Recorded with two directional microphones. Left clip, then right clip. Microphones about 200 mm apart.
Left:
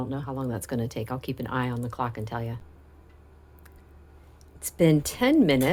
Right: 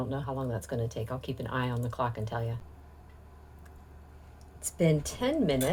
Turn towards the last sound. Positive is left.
turn(degrees=40)  # may be behind; listen again after turning